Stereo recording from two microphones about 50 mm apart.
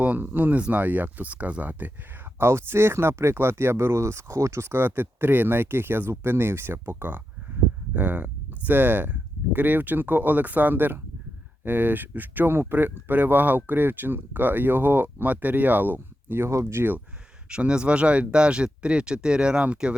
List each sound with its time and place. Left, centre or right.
0.2 s speech: right
2.4 s speech: right
4.7 s speech: right
7.9 s speech: right
16.5 s speech: right
16.7 s speech: right
17.5 s speech: right